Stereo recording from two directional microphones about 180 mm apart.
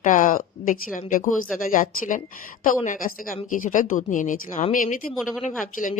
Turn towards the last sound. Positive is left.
turn(degrees=45)  # may be behind; listen again after turning